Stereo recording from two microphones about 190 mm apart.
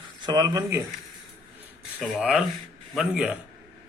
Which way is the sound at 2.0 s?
5° right (ahead or behind).